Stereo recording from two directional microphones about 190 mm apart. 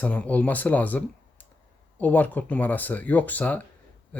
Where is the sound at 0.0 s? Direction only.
5° left (ahead or behind).